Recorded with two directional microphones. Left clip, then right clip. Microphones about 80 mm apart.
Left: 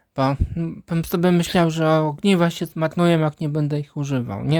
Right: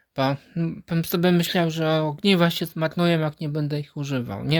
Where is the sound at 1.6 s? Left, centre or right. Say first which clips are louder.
Left 4 dB; left.